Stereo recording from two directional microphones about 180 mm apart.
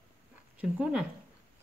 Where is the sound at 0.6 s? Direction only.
5° right (ahead or behind).